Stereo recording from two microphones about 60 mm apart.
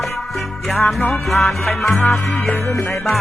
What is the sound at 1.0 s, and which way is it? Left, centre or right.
Music, left.